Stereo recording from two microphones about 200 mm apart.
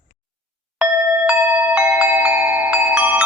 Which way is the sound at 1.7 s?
5° right (ahead or behind).